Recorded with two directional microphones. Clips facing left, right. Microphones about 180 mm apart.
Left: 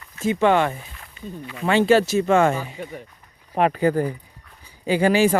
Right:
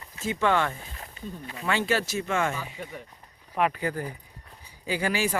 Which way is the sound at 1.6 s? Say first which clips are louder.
Left 10 dB; 25° left (ahead or behind).